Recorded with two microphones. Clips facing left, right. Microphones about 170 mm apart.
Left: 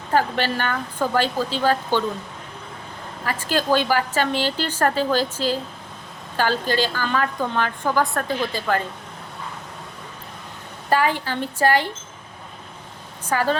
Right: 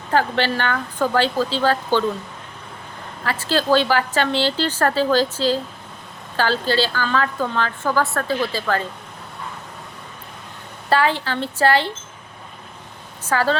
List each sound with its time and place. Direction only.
0.1 s a woman's voice: 10° left (ahead or behind)
3.2 s a woman's voice: 15° left (ahead or behind)
10.8 s a woman's voice: 15° left (ahead or behind)
13.2 s a woman's voice: 15° left (ahead or behind)